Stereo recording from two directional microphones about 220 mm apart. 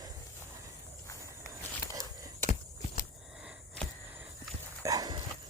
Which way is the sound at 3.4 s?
5° left (ahead or behind).